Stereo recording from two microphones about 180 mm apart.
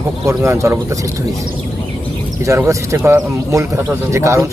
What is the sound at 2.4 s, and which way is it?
Speech, 15° right (ahead or behind).